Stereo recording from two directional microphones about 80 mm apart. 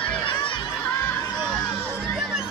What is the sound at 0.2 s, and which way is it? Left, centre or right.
Crowd, left.